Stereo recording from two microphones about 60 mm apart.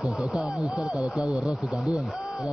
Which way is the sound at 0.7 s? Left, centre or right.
Centre.